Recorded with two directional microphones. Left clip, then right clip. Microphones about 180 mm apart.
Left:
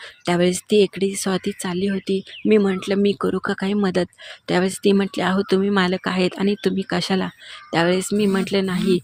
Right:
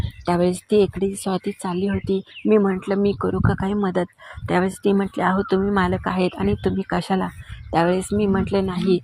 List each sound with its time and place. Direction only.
0.3 s speech: 25° left (ahead or behind)